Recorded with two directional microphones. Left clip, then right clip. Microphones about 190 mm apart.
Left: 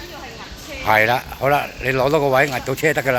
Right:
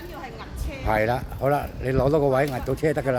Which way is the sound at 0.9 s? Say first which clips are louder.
Left 8 dB; centre (ahead or behind).